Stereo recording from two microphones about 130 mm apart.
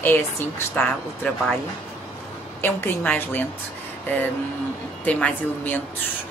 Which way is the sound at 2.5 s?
15° left (ahead or behind).